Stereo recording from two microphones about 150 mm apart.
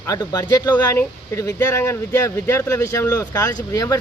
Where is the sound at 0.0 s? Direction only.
25° left (ahead or behind).